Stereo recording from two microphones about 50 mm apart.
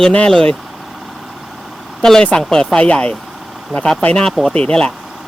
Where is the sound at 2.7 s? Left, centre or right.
Left.